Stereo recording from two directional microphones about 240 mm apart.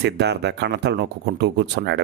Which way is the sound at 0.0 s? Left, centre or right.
Right.